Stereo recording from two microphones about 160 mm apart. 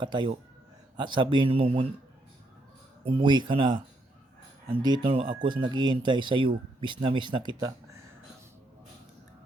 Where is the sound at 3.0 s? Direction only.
30° right (ahead or behind).